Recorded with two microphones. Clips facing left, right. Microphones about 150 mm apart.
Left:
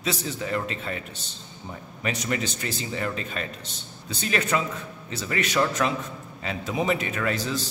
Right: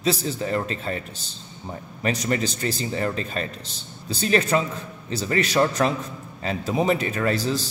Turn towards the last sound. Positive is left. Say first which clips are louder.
# right 4 dB
turn(degrees=-35)  # may be behind; listen again after turning